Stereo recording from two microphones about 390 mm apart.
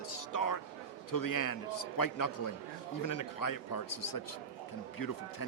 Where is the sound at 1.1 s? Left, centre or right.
Left.